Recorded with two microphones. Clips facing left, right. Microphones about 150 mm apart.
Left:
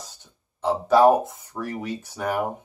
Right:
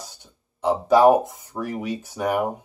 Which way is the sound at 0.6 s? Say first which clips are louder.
Right 1 dB; 15° right (ahead or behind).